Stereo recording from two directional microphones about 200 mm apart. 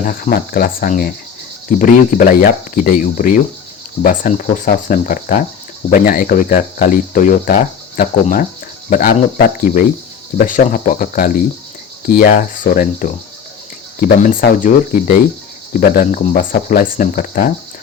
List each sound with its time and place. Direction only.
0.0 s speech: 45° left (ahead or behind)